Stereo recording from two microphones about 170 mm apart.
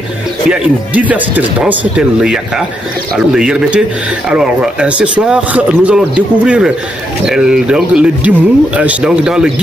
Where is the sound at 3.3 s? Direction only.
5° right (ahead or behind).